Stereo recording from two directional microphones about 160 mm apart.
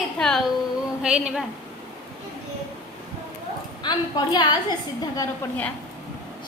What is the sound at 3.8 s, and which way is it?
Speech, 25° left (ahead or behind).